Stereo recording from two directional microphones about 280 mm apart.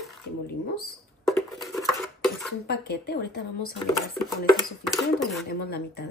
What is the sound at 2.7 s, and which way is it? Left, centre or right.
Speech, left.